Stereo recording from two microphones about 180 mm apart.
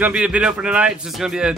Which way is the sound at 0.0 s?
5° right (ahead or behind).